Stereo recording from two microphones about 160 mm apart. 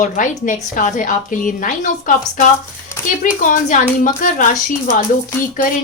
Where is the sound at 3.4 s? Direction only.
55° left (ahead or behind).